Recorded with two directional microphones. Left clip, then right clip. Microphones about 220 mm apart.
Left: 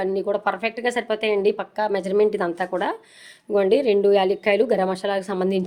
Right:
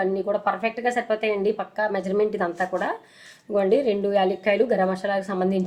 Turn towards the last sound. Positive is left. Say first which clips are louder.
# left 1 dB
turn(degrees=45)  # may be behind; listen again after turning